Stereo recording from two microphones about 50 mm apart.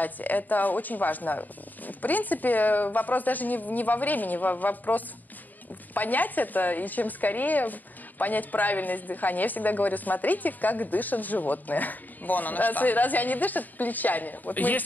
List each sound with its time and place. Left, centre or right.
0.0 s a woman's voice: left